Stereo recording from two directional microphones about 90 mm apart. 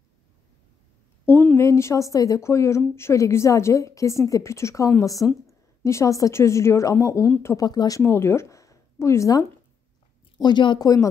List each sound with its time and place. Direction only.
1.2 s a woman's voice: 20° left (ahead or behind)
1.7 s a woman's voice: 35° left (ahead or behind)
7.6 s speech: 45° left (ahead or behind)
8.0 s speech: 25° left (ahead or behind)
10.3 s speech: 60° left (ahead or behind)
10.8 s a woman's voice: 40° left (ahead or behind)